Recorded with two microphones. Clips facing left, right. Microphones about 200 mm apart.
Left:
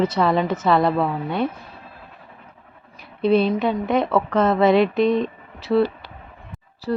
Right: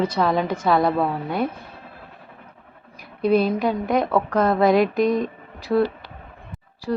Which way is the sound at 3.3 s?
10° right (ahead or behind).